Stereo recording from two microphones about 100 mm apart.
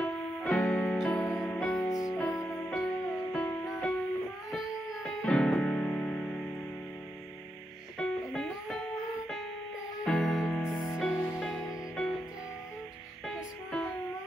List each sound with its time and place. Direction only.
0.0 s music: 15° left (ahead or behind)
1.2 s music: 15° left (ahead or behind)
1.6 s music: centre (ahead or behind)
1.9 s music: 35° left (ahead or behind)
2.7 s music: 5° left (ahead or behind)
5.2 s music: 10° left (ahead or behind)
8.0 s music: 5° left (ahead or behind)
10.0 s music: 5° left (ahead or behind)
13.3 s music: 10° left (ahead or behind)